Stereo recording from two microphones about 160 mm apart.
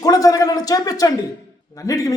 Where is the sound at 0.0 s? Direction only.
20° left (ahead or behind).